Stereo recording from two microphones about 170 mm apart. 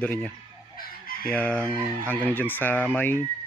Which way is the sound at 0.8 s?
60° left (ahead or behind).